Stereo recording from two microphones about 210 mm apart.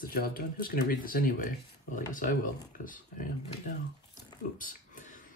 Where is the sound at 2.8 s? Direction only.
40° left (ahead or behind).